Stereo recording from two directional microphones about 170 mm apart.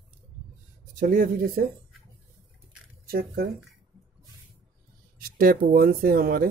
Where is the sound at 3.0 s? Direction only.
65° right (ahead or behind).